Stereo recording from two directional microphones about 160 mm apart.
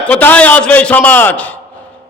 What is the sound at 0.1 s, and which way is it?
A man's voice, 10° left (ahead or behind).